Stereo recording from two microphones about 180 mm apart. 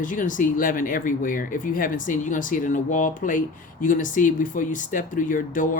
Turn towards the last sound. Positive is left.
turn(degrees=50)  # may be behind; listen again after turning